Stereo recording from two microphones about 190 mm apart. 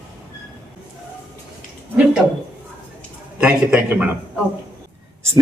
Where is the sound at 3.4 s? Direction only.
5° right (ahead or behind).